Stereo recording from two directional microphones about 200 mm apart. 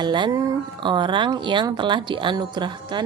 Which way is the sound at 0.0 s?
20° right (ahead or behind).